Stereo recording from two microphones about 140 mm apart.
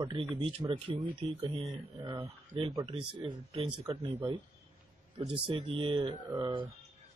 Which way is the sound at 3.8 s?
50° right (ahead or behind).